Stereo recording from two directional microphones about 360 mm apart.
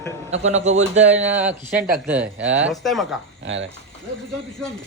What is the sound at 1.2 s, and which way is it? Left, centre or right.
A man's voice, centre.